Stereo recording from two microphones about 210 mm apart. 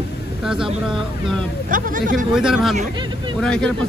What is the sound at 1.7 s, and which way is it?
Speech, 40° right (ahead or behind).